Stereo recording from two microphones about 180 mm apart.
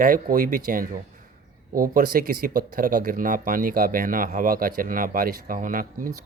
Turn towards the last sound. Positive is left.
turn(degrees=-50)  # may be behind; listen again after turning